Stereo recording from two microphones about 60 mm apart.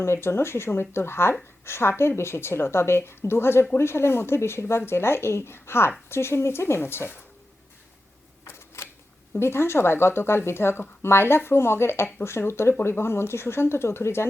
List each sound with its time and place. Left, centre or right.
0.0 s a woman's voice: left
8.4 s camera: left
9.4 s a woman's voice: left